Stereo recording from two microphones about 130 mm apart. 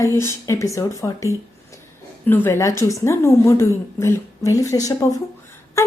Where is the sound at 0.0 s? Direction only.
20° left (ahead or behind).